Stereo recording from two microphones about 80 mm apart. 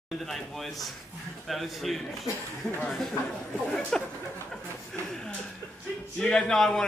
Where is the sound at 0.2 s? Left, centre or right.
Centre.